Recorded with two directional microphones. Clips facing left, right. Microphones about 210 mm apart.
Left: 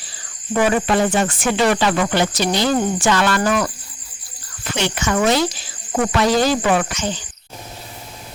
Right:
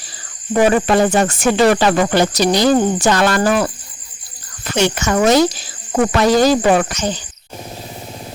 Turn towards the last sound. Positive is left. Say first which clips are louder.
# right 4 dB
turn(degrees=-40)  # may be behind; listen again after turning